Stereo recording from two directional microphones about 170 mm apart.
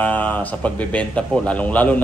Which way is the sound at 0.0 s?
10° left (ahead or behind).